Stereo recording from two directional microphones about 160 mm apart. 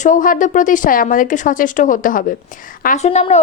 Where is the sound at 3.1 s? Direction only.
40° left (ahead or behind).